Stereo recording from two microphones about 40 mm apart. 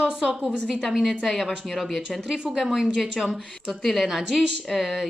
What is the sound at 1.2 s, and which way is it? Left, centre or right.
Speech, centre.